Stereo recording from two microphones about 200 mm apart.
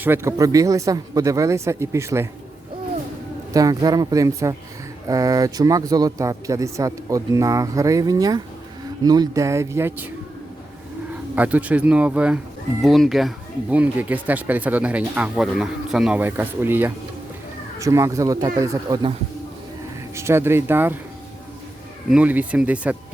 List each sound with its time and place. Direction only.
0.0 s speech: 10° right (ahead or behind)
3.5 s speech: 20° right (ahead or behind)
11.1 s speech: 5° right (ahead or behind)
20.1 s speech: 10° right (ahead or behind)
22.1 s speech: 5° right (ahead or behind)